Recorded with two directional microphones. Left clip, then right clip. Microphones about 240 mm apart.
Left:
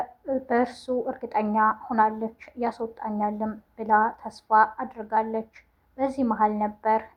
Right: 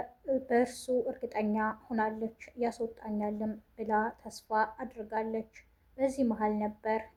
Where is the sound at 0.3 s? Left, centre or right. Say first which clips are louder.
Left 4 dB; centre.